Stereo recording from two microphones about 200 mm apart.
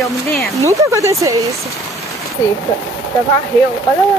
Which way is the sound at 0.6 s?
15° right (ahead or behind).